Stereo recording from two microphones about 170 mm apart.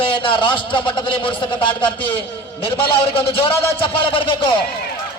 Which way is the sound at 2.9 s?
30° left (ahead or behind).